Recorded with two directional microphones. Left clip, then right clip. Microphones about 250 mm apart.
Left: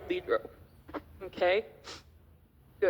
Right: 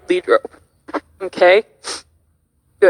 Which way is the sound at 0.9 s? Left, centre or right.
Right.